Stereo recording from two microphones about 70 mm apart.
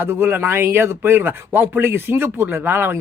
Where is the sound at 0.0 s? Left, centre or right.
Right.